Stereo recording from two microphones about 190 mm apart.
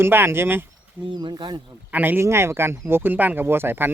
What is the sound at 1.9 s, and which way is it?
Speech, 10° right (ahead or behind).